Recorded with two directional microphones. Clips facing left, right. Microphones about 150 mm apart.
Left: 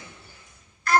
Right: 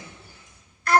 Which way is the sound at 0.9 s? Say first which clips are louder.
Right 2 dB; 65° right (ahead or behind).